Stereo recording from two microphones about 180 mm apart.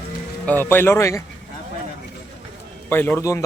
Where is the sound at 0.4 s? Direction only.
10° left (ahead or behind).